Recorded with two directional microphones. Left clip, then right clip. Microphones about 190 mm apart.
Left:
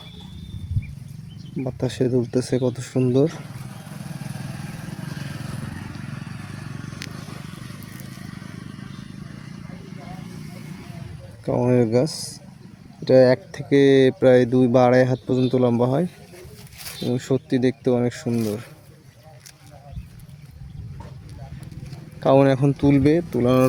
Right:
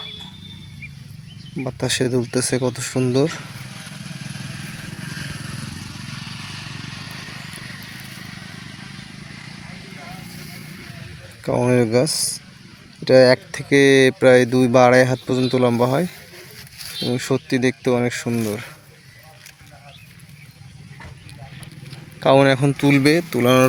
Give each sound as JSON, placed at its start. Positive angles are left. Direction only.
{"t": 1.8, "sound": "speech", "side_deg": 5}
{"t": 3.8, "sound": "vehicle", "side_deg": 40}
{"t": 11.4, "sound": "speech", "side_deg": 0}
{"t": 21.8, "sound": "a sound", "side_deg": 5}
{"t": 22.8, "sound": "speech", "side_deg": -5}